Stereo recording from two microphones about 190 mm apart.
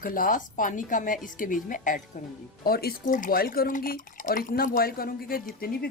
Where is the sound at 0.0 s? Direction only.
45° left (ahead or behind).